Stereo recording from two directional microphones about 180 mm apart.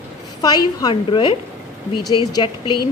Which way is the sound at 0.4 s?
20° left (ahead or behind).